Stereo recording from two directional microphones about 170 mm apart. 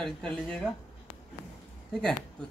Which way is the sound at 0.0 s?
5° left (ahead or behind).